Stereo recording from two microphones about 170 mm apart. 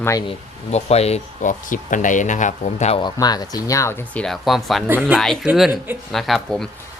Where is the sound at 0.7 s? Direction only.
40° left (ahead or behind).